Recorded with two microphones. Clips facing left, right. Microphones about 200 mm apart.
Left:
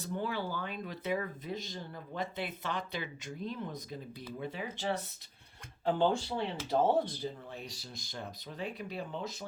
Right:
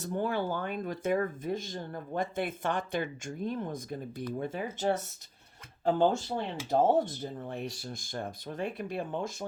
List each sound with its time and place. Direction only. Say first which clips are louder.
0.0 s speech: right 5 dB; 50° right (ahead or behind)